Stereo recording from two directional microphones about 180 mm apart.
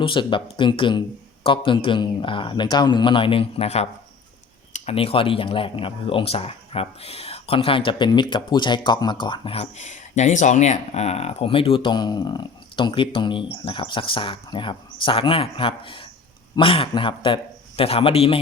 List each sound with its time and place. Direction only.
0.0 s a man's voice: 30° left (ahead or behind)